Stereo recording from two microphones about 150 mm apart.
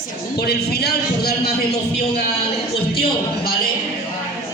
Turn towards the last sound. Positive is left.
turn(degrees=90)